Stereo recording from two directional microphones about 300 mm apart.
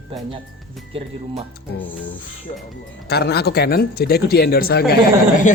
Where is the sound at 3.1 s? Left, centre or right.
Left.